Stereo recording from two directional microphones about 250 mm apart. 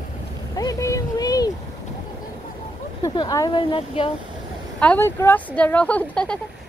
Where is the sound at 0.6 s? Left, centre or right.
Centre.